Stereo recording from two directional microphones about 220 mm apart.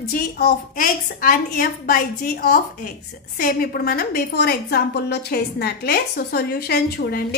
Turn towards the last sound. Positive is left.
turn(degrees=45)  # may be behind; listen again after turning